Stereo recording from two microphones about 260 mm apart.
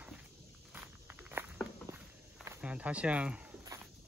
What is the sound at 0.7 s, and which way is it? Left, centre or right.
Walk, centre.